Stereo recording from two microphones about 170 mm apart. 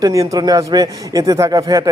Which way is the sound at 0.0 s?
20° right (ahead or behind).